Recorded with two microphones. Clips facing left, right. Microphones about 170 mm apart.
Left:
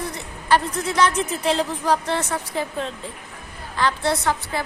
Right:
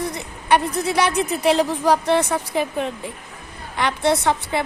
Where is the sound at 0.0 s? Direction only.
15° right (ahead or behind).